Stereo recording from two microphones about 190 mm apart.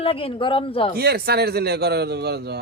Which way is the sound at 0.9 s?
55° right (ahead or behind).